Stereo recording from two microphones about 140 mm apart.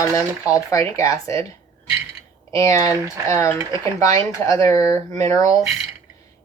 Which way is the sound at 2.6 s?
25° left (ahead or behind).